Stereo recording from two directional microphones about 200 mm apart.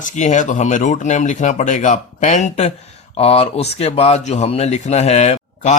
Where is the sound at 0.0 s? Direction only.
35° left (ahead or behind).